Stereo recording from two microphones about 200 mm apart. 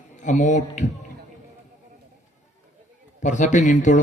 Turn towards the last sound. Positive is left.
turn(degrees=35)  # may be behind; listen again after turning